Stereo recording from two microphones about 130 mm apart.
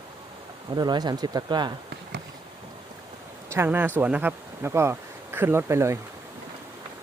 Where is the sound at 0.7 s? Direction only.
30° right (ahead or behind).